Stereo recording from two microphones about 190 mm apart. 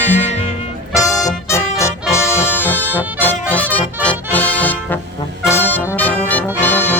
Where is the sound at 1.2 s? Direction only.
15° left (ahead or behind).